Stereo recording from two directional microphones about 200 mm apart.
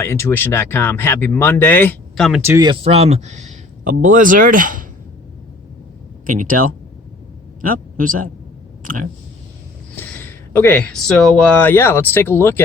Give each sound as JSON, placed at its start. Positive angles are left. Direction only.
{"t": 0.0, "sound": "speech", "side_deg": 10}
{"t": 2.4, "sound": "a man's voice", "side_deg": -15}
{"t": 6.2, "sound": "a man's voice", "side_deg": -40}
{"t": 10.0, "sound": "speech", "side_deg": 10}